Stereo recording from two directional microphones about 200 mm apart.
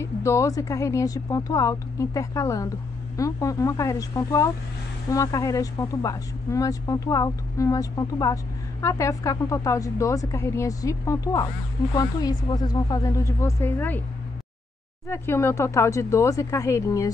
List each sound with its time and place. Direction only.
0.0 s a woman's voice: 15° left (ahead or behind)
15.0 s a woman's voice: 10° left (ahead or behind)